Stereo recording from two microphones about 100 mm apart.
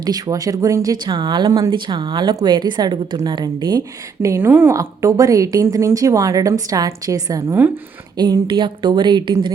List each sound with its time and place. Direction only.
0.0 s a woman's voice: 40° right (ahead or behind)
1.1 s speech: 50° right (ahead or behind); by 4.7 s 20° right (ahead or behind)
4.7 s a woman's voice: 30° right (ahead or behind)
8.2 s speech: 45° right (ahead or behind)